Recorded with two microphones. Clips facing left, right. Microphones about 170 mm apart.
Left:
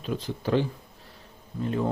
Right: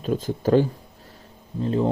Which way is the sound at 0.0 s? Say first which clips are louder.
Right 7 dB; 45° right (ahead or behind).